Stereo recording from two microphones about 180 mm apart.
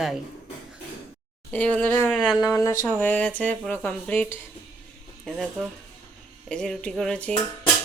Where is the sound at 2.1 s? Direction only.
Centre (ahead or behind).